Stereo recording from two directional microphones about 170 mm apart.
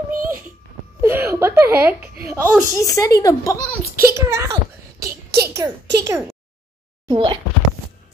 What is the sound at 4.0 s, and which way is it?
A child's voice, 15° right (ahead or behind).